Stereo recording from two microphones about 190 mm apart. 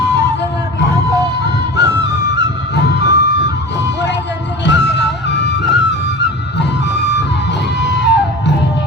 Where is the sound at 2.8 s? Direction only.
60° left (ahead or behind).